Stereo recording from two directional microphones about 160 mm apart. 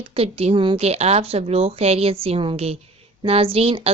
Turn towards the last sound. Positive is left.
turn(degrees=-40)  # may be behind; listen again after turning